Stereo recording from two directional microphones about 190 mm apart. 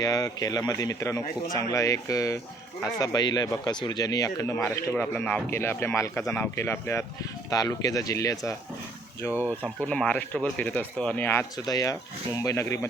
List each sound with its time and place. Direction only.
0.0 s speech: 20° left (ahead or behind)
9.3 s speech: 10° right (ahead or behind)
9.8 s speech: 5° left (ahead or behind)